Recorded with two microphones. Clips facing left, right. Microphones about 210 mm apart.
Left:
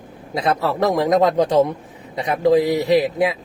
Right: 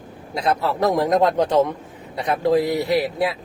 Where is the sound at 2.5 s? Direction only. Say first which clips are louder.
Left 4 dB; 20° left (ahead or behind).